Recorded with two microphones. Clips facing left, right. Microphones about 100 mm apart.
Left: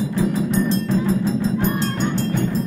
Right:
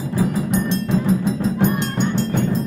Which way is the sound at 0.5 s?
35° left (ahead or behind).